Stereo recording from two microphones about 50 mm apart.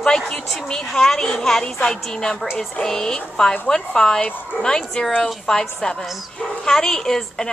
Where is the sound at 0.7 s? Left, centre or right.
Centre.